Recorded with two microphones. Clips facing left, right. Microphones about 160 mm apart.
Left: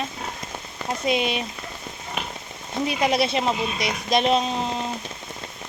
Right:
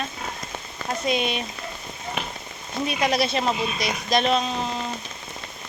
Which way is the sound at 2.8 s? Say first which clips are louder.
Left 1 dB; 25° left (ahead or behind).